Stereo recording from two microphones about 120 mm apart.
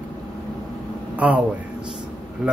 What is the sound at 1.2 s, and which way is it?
Speech, 10° right (ahead or behind).